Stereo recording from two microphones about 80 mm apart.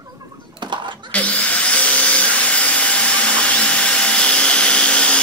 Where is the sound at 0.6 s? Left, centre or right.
Right.